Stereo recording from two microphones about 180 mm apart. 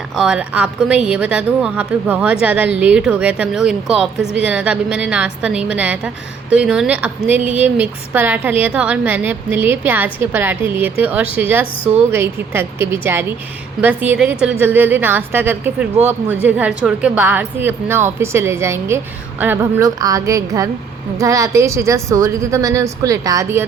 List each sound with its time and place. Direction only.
0.2 s a woman's voice: 5° right (ahead or behind)